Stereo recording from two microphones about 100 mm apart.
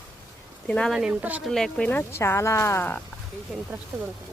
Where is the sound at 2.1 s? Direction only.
25° left (ahead or behind).